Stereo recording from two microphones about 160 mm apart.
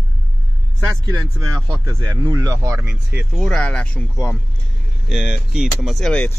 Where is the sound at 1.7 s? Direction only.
25° right (ahead or behind).